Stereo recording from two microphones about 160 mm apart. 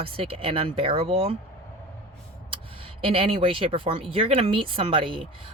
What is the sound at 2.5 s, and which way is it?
Speech, 35° right (ahead or behind).